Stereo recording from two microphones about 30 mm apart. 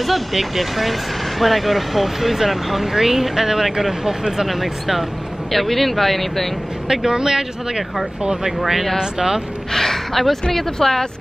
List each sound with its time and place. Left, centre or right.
0.0 s speech: centre
4.6 s speech: centre
7.1 s speech: right
8.5 s speech: centre
9.7 s gasp: centre
10.5 s speech: centre